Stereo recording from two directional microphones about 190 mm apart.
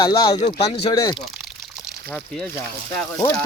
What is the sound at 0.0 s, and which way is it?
Speech, 20° left (ahead or behind).